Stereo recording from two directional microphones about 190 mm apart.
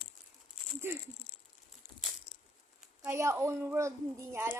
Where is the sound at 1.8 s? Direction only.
40° left (ahead or behind).